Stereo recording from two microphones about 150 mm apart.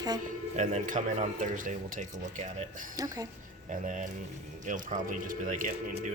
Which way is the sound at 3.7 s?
60° right (ahead or behind).